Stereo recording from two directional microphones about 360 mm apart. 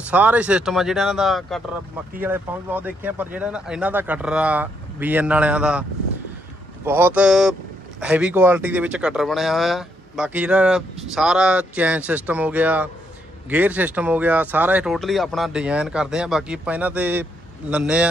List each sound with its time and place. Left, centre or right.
0.1 s speech: centre